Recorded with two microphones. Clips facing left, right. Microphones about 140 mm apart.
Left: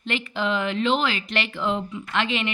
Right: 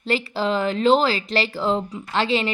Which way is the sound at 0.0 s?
35° right (ahead or behind).